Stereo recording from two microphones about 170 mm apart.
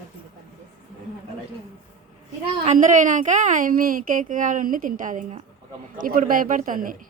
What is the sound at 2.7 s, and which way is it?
A woman's voice, 50° right (ahead or behind).